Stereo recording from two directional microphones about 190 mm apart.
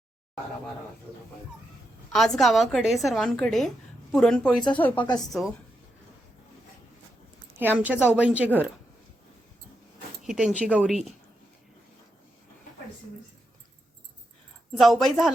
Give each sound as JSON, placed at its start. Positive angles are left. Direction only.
{"t": 2.1, "sound": "a woman's voice", "side_deg": 0}
{"t": 5.0, "sound": "a woman's voice", "side_deg": 20}
{"t": 7.6, "sound": "speech", "side_deg": -10}
{"t": 10.2, "sound": "a woman's voice", "side_deg": 0}
{"t": 14.7, "sound": "a woman's voice", "side_deg": 0}